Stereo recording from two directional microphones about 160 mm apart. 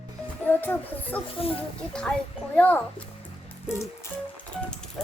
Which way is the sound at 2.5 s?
10° left (ahead or behind).